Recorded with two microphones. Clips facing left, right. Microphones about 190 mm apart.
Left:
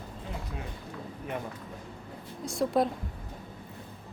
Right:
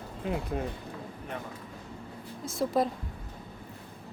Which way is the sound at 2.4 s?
Centre (ahead or behind).